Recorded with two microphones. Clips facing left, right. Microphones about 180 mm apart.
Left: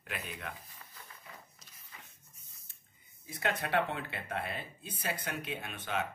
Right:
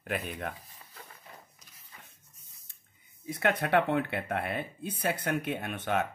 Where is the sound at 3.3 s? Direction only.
60° right (ahead or behind).